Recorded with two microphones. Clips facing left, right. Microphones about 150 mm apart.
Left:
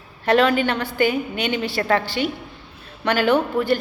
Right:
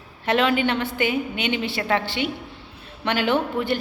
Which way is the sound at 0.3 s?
40° left (ahead or behind).